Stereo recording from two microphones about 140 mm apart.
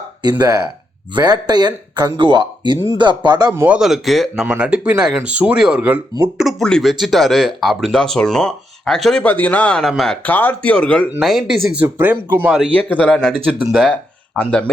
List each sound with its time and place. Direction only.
0.2 s speech: 30° right (ahead or behind)
3.5 s speech: 15° right (ahead or behind)
3.8 s speech: 5° right (ahead or behind)
6.3 s speech: centre (ahead or behind)
10.2 s speech: 15° left (ahead or behind)
11.8 s speech: 15° right (ahead or behind)
12.9 s speech: 5° left (ahead or behind)
13.3 s speech: 10° right (ahead or behind)
14.3 s speech: 10° left (ahead or behind)